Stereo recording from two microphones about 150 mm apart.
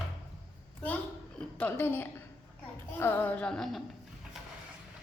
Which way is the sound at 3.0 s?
15° left (ahead or behind).